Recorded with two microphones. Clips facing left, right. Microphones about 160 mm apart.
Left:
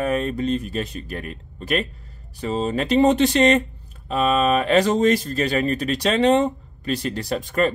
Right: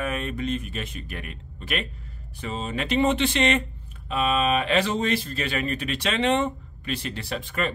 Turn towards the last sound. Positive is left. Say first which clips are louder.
# left 7 dB
turn(degrees=40)  # may be behind; listen again after turning